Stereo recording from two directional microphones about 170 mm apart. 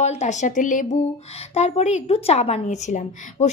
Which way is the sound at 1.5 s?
40° left (ahead or behind).